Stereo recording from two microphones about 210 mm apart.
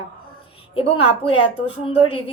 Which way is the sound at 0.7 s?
25° left (ahead or behind).